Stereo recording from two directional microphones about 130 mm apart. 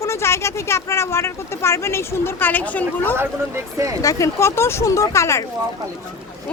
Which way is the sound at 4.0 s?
25° left (ahead or behind).